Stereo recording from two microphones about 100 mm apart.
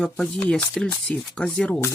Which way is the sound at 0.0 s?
10° left (ahead or behind).